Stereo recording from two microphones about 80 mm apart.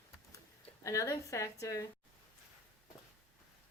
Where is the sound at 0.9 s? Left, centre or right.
Left.